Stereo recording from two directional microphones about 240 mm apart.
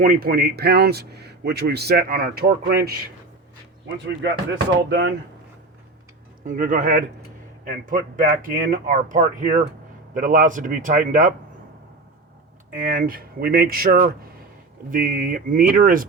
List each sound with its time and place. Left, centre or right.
0.0 s a man's voice: right
6.4 s a man's voice: right
12.7 s a man's voice: right